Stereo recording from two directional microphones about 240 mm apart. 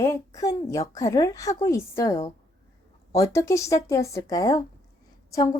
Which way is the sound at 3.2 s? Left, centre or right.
Centre.